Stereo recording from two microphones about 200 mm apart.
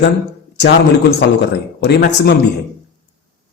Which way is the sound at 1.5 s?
55° left (ahead or behind).